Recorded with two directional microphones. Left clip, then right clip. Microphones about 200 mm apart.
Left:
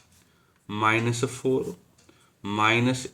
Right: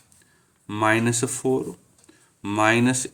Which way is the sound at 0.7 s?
50° right (ahead or behind).